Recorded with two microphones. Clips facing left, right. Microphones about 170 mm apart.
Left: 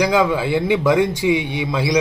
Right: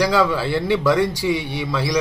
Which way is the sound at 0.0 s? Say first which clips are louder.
Left 1 dB; 15° left (ahead or behind).